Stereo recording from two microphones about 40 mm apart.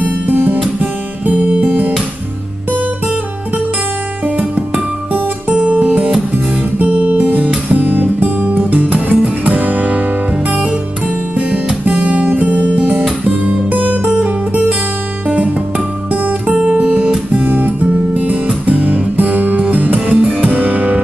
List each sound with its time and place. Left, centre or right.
0.0 s guitar: right
5.5 s music: right
6.3 s guitar: right
8.9 s music: right
11.3 s music: right
13.3 s guitar: right
15.2 s music: right
16.7 s guitar: right
17.3 s music: right